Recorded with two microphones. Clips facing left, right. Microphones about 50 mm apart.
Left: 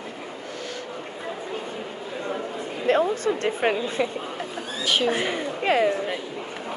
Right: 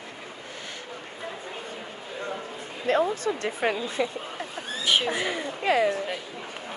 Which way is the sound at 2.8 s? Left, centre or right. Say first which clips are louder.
Left 3 dB; left.